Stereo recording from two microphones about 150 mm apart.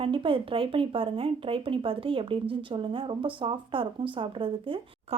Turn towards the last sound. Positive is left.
turn(degrees=-35)  # may be behind; listen again after turning